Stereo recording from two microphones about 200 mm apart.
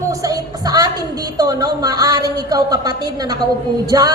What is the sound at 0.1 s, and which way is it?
A woman's voice, 15° right (ahead or behind).